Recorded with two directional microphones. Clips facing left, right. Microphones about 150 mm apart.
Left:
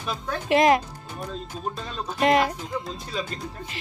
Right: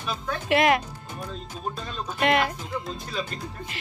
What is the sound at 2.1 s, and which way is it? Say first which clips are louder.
Speech: left 3 dB; 30° left (ahead or behind).